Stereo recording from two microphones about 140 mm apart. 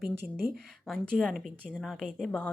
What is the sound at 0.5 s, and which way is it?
A woman's voice, 5° left (ahead or behind).